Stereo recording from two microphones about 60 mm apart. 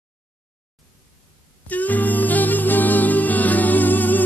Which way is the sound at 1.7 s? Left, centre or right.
Left.